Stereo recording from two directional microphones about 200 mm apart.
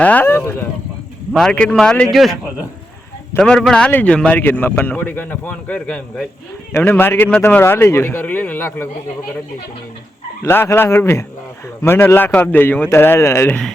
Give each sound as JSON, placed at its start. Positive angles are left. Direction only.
{"t": 0.0, "sound": "a man's voice", "side_deg": 10}
{"t": 10.4, "sound": "a man's voice", "side_deg": 10}